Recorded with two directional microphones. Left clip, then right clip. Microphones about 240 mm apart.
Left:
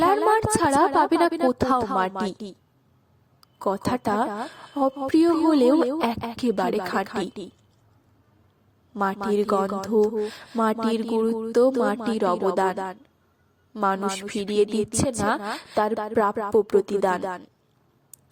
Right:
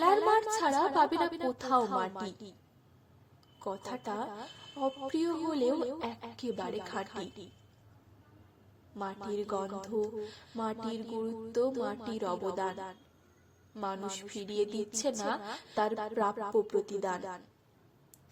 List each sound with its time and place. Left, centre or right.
0.0 s a woman's voice: left
9.0 s a woman's voice: left